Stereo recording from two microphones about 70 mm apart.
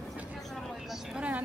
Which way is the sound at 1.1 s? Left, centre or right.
Right.